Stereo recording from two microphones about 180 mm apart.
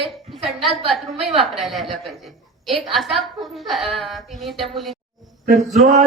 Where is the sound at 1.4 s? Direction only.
Centre (ahead or behind).